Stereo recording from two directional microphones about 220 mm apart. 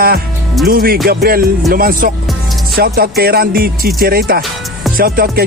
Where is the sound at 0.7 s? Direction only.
40° right (ahead or behind).